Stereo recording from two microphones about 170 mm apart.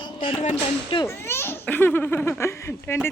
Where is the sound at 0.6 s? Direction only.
30° left (ahead or behind).